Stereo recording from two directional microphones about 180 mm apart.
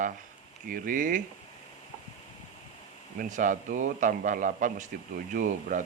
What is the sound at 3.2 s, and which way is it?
Speech, 45° right (ahead or behind).